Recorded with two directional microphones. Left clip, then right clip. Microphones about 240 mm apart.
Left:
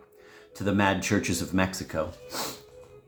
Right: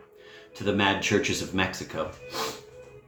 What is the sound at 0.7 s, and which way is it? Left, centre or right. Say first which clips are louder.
Speech: right 1 dB; left.